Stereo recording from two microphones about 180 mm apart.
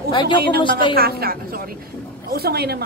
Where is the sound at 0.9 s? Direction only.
60° right (ahead or behind).